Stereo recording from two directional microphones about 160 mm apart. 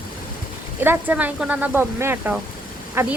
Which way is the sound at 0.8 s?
10° right (ahead or behind).